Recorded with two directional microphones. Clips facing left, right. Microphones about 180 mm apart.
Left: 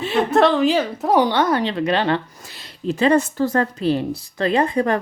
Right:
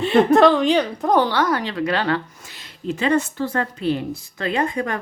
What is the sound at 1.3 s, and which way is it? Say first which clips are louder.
Speech: left 2 dB; 25° left (ahead or behind).